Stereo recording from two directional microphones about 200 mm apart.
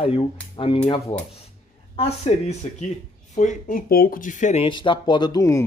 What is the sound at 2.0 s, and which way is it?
Speech, 35° left (ahead or behind).